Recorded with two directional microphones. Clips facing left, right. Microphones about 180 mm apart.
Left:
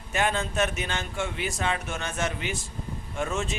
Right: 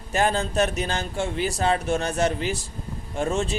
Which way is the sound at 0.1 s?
35° right (ahead or behind).